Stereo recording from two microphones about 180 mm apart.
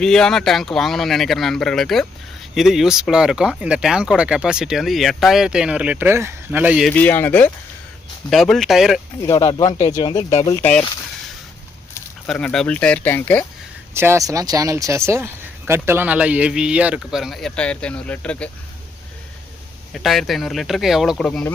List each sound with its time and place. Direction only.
0.0 s speech: 5° left (ahead or behind)
6.9 s speech: 10° left (ahead or behind)
9.2 s speech: 20° left (ahead or behind)
10.6 s speech: 5° left (ahead or behind)
12.2 s speech: 5° left (ahead or behind)
13.9 s speech: 15° right (ahead or behind); by 18.5 s 5° left (ahead or behind)
19.9 s speech: centre (ahead or behind)